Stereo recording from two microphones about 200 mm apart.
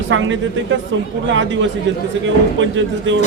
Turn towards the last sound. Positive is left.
turn(degrees=-65)  # may be behind; listen again after turning